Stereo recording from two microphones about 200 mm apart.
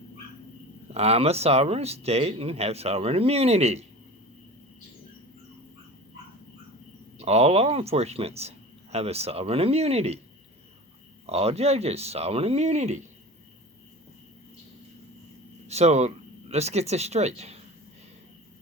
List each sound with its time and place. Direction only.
0.9 s speech: 30° right (ahead or behind)
7.2 s speech: 30° right (ahead or behind)
11.3 s speech: 30° right (ahead or behind)
15.6 s speech: 35° right (ahead or behind)